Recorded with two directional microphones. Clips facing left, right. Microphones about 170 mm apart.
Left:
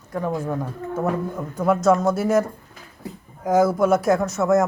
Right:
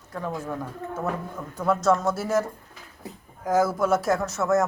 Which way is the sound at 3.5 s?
15° left (ahead or behind).